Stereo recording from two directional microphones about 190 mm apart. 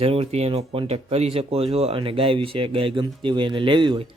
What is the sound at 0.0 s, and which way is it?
Speech, 30° right (ahead or behind).